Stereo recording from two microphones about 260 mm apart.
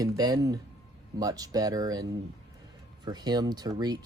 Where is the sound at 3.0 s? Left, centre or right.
Centre.